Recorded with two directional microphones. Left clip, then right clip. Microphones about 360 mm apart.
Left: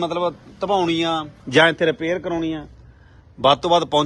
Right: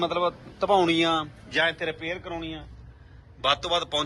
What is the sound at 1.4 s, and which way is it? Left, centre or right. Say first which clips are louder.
A man's voice: left 11 dB; left.